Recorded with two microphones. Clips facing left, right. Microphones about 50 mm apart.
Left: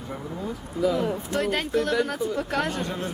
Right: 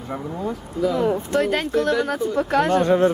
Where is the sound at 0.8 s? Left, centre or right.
Centre.